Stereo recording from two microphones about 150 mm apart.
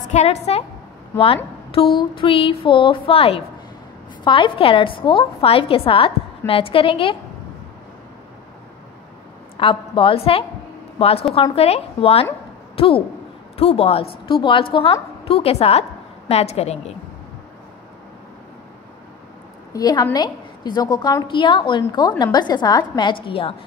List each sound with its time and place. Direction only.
0.0 s a woman's voice: 50° left (ahead or behind)
9.6 s a woman's voice: 35° left (ahead or behind)
19.7 s a woman's voice: 25° left (ahead or behind)
23.2 s a woman's voice: 40° left (ahead or behind)